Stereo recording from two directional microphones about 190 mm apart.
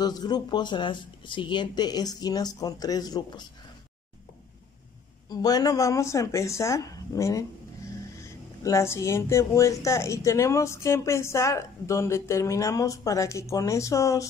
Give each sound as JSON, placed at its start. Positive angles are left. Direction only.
{"t": 0.0, "sound": "speech", "side_deg": 20}
{"t": 5.3, "sound": "speech", "side_deg": 20}